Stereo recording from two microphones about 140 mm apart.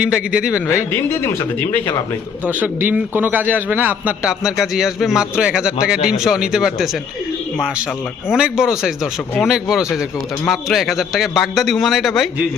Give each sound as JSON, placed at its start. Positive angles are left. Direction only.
{"t": 0.0, "sound": "a man's voice", "side_deg": -5}
{"t": 0.7, "sound": "speech", "side_deg": 20}
{"t": 2.5, "sound": "a man's voice", "side_deg": -10}
{"t": 8.3, "sound": "a man's voice", "side_deg": -5}